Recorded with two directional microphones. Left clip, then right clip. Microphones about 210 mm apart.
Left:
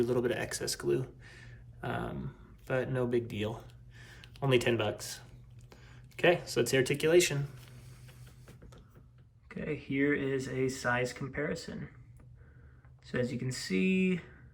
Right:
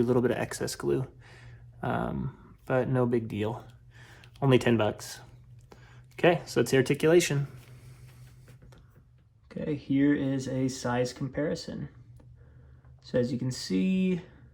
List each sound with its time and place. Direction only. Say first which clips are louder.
0.0 s speech: right 4 dB; 20° right (ahead or behind)
9.5 s speech: right 5 dB; 25° right (ahead or behind)
13.1 s speech: right 6 dB; 20° right (ahead or behind)